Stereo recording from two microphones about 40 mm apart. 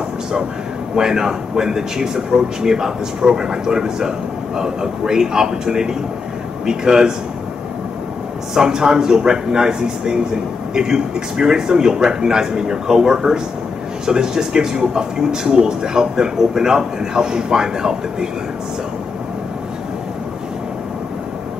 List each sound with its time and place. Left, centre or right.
0.9 s a man's voice: centre
8.5 s a man's voice: centre